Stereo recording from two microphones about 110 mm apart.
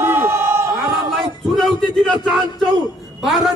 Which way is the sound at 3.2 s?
5° right (ahead or behind).